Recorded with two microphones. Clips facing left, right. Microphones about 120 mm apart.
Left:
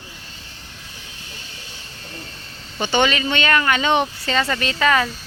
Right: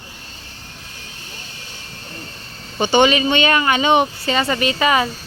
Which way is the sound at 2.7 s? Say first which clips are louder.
Right 5 dB; 15° right (ahead or behind).